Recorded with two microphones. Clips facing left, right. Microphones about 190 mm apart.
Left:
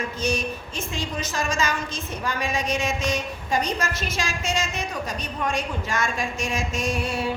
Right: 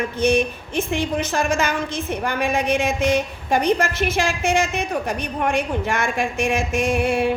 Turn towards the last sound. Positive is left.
turn(degrees=-60)  # may be behind; listen again after turning